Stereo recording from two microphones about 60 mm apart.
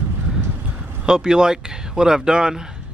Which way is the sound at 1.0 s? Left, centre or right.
Centre.